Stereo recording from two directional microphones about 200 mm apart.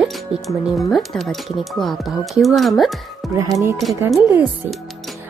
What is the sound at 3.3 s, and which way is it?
Speech, 15° right (ahead or behind).